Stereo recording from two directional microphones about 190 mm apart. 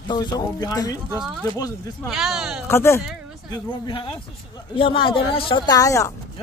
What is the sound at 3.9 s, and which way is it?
Speech, 25° left (ahead or behind).